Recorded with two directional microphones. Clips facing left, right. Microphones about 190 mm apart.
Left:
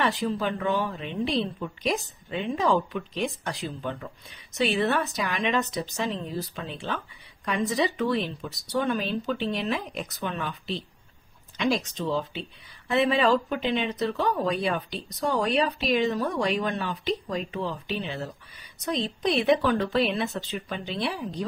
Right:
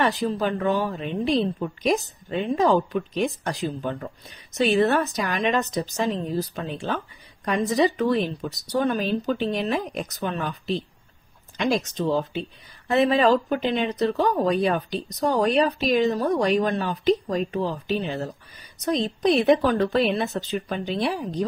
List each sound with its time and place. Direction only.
0.0 s a woman's voice: 40° right (ahead or behind)